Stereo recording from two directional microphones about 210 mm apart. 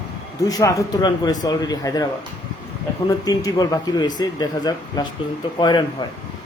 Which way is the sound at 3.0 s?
15° left (ahead or behind).